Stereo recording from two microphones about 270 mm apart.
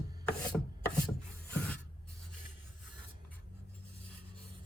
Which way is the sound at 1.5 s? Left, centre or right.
Centre.